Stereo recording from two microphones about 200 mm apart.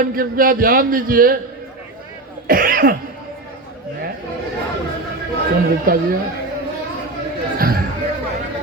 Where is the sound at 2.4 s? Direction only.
45° right (ahead or behind).